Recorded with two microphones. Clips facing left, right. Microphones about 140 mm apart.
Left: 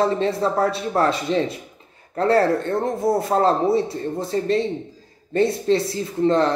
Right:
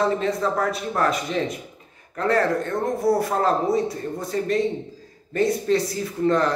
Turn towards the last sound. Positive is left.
turn(degrees=25)  # may be behind; listen again after turning